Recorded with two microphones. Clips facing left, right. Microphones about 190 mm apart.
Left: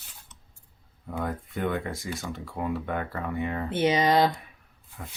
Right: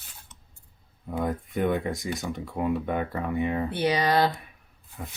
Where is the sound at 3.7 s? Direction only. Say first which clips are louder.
Left 5 dB; 20° left (ahead or behind).